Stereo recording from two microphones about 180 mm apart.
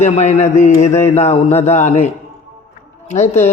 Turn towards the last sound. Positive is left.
turn(degrees=40)  # may be behind; listen again after turning